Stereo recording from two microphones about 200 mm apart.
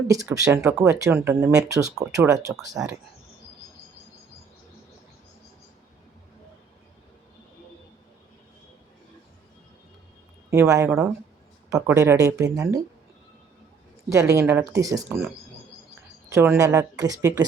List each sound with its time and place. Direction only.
0.3 s speech: 15° right (ahead or behind)
10.5 s speech: 15° right (ahead or behind)
14.1 s speech: 15° right (ahead or behind)
16.3 s speech: 15° right (ahead or behind)